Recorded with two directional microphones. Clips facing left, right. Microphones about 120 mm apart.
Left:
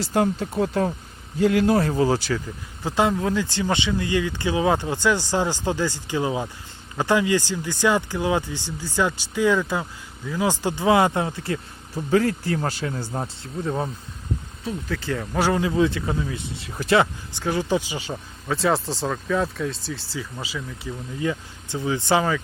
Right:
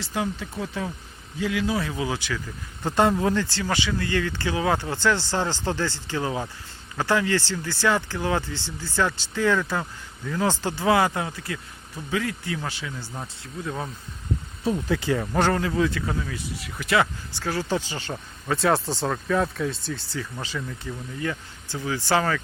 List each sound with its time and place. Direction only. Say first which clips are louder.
0.0 s speech: left 7 dB; 45° left (ahead or behind)
2.8 s speech: right 1 dB; centre (ahead or behind)
3.3 s speech: left 2 dB; 15° left (ahead or behind)
14.8 s speech: right 4 dB; 15° right (ahead or behind)
15.1 s speech: even; 5° right (ahead or behind)
15.4 s speech: left 3 dB; 10° left (ahead or behind)
18.4 s speech: even; centre (ahead or behind)
21.2 s speech: left 5 dB; 20° left (ahead or behind)